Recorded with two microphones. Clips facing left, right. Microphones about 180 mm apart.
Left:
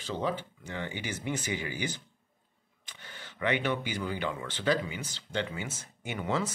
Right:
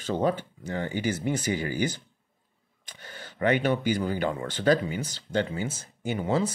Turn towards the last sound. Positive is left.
turn(degrees=-35)  # may be behind; listen again after turning